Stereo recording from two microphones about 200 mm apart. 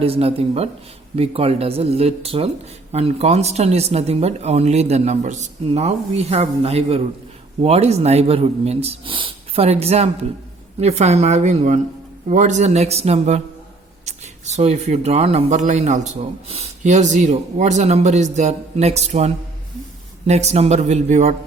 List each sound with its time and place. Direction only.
0.0 s speech: 30° right (ahead or behind)